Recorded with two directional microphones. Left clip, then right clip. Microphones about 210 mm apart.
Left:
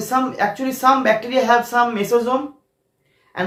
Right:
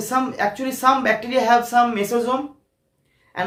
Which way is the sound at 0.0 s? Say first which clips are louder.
Left 2 dB; 15° right (ahead or behind).